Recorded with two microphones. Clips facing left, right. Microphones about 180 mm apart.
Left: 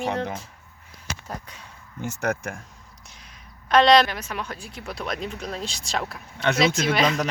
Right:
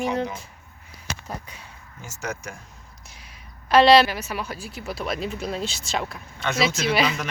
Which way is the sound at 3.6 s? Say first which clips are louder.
Right 2 dB; 5° right (ahead or behind).